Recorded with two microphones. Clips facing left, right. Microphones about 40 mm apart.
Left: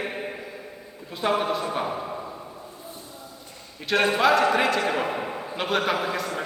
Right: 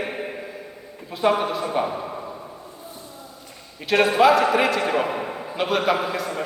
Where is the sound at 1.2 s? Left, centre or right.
Centre.